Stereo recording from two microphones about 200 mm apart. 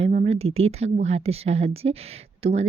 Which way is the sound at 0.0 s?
35° right (ahead or behind).